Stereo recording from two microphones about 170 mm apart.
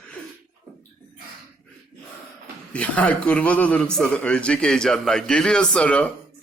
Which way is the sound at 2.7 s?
5° left (ahead or behind).